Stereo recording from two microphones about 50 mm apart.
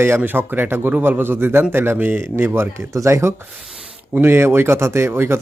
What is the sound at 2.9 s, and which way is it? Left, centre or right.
Speech, right.